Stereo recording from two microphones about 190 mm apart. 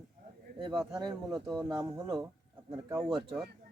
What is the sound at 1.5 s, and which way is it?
Speech, 20° right (ahead or behind).